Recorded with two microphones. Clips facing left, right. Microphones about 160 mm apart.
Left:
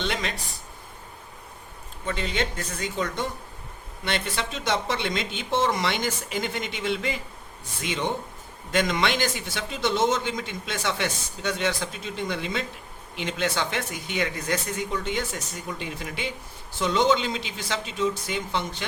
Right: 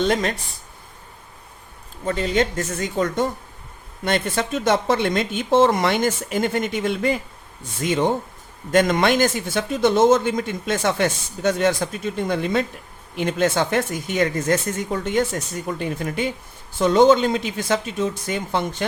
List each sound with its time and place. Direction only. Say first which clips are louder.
0.0 s speech: right 9 dB; 45° right (ahead or behind)
2.0 s speech: right 7 dB; 40° right (ahead or behind)